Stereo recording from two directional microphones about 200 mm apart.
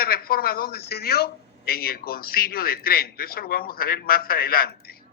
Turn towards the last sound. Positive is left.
turn(degrees=50)  # may be behind; listen again after turning